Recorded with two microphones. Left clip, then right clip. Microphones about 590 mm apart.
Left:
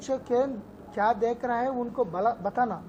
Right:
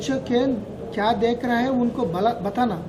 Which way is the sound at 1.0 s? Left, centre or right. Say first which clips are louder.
Right 4 dB; left.